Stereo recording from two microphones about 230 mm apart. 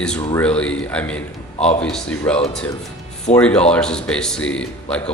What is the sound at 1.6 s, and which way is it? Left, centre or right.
Speech, left.